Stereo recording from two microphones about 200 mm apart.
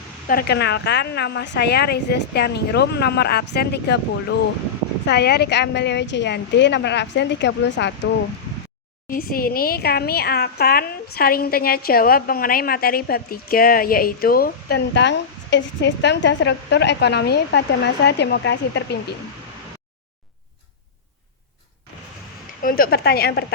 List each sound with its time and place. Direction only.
0.3 s speech: 50° left (ahead or behind)
9.0 s a woman's voice: 45° left (ahead or behind)
22.6 s a woman's voice: 45° left (ahead or behind)